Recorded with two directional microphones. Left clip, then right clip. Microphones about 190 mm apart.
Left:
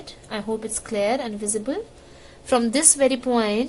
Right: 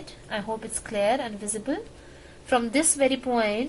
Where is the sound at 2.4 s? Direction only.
40° left (ahead or behind).